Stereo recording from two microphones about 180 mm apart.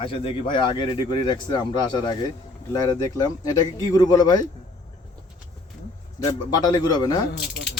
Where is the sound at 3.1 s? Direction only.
20° left (ahead or behind).